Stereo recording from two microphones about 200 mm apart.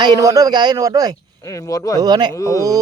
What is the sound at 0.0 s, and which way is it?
A man's voice, 20° right (ahead or behind).